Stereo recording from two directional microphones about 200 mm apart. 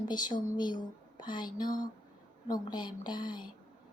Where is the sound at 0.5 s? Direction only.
20° left (ahead or behind).